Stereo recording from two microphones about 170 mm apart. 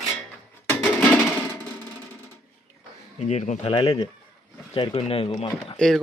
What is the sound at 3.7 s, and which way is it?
Speech, 25° left (ahead or behind).